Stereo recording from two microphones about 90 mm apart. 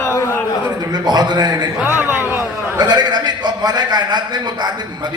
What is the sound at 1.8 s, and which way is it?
Speech, 25° right (ahead or behind).